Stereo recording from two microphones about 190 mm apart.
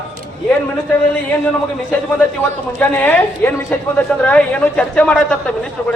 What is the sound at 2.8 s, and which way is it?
A man's voice, 10° left (ahead or behind).